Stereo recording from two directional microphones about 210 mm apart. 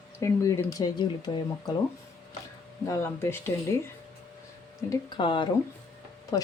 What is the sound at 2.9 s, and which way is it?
Speech, 10° left (ahead or behind).